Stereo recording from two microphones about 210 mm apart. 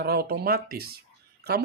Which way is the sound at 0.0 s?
50° right (ahead or behind).